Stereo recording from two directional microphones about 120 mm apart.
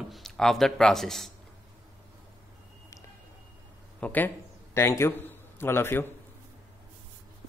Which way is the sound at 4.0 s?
15° left (ahead or behind).